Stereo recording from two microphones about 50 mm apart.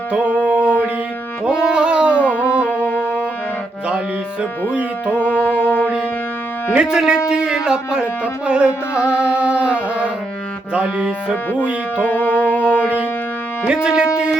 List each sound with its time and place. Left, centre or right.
0.4 s mantra: right
1.5 s music: centre
2.6 s music: left
4.7 s speech: right
5.1 s music: left
6.7 s speech: centre
12.0 s music: left
13.8 s speech: centre